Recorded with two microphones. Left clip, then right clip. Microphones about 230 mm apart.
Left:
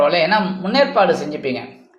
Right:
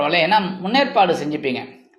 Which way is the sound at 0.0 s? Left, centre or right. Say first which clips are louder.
Left 2 dB; right.